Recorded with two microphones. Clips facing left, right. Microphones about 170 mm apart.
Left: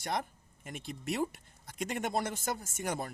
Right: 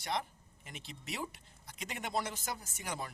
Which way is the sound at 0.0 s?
50° left (ahead or behind).